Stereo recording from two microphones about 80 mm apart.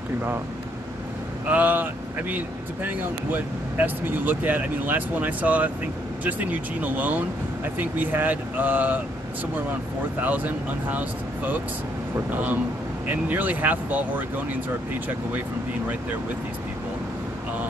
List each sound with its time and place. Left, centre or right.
1.5 s speech: right
6.8 s speech: centre
10.2 s speech: right
13.1 s speech: right